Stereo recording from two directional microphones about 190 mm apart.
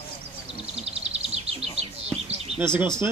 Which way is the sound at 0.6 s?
35° right (ahead or behind).